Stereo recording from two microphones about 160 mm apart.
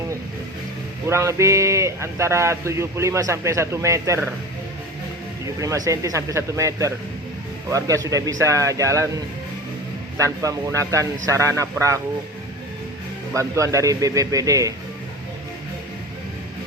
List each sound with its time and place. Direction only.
1.0 s a man's voice: 15° right (ahead or behind)
5.5 s speech: 20° right (ahead or behind)
10.2 s speech: 20° right (ahead or behind)
13.3 s speech: 20° right (ahead or behind)